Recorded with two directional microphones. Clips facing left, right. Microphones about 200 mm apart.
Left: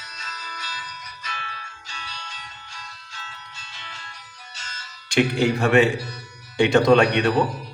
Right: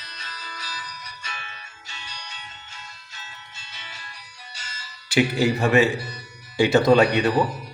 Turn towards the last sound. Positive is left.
turn(degrees=-5)  # may be behind; listen again after turning